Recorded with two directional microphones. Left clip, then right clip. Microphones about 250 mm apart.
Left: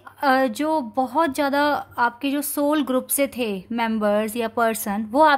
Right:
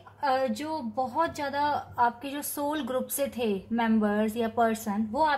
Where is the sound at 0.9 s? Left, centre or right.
Left.